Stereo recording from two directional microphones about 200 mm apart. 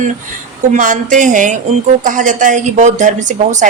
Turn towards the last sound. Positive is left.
turn(degrees=-35)  # may be behind; listen again after turning